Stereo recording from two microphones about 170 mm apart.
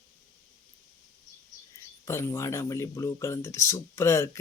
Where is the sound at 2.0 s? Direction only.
15° left (ahead or behind).